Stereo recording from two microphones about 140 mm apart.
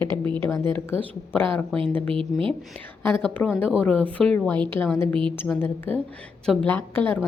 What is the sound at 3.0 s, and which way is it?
Speech, 10° left (ahead or behind).